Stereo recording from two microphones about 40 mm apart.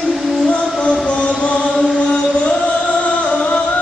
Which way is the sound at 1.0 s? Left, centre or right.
Left.